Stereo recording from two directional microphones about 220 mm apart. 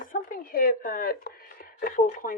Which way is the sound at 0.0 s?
40° left (ahead or behind).